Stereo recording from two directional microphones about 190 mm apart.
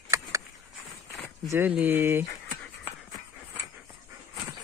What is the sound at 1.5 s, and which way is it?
Speech, 10° right (ahead or behind).